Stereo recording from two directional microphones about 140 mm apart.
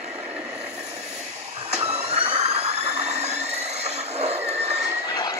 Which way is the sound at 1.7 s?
50° right (ahead or behind).